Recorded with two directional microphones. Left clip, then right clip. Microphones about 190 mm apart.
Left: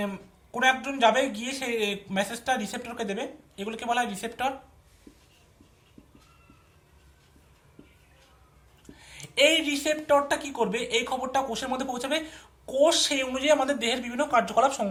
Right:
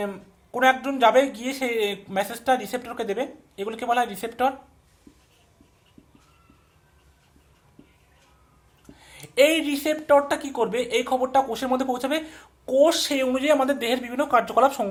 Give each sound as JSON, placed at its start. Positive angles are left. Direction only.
{"t": 0.5, "sound": "speech", "side_deg": -45}
{"t": 8.9, "sound": "speech", "side_deg": -40}